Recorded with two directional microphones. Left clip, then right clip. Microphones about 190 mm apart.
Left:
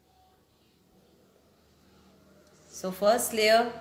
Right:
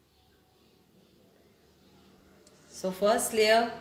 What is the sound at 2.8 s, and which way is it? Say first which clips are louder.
Speech: left 2 dB; 20° left (ahead or behind).